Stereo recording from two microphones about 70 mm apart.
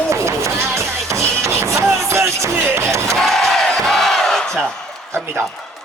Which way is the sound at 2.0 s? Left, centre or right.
Right.